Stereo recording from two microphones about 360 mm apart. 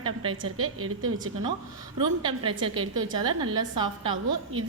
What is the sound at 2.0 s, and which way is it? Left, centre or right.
A woman's voice, centre.